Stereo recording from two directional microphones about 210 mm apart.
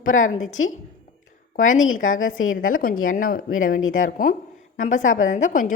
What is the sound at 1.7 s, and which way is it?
Speech, 70° left (ahead or behind).